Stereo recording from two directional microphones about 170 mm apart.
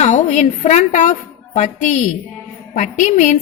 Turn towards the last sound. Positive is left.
turn(degrees=45)  # may be behind; listen again after turning